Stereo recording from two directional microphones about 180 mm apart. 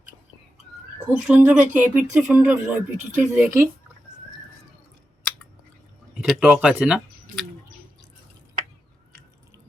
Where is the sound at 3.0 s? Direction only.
45° right (ahead or behind).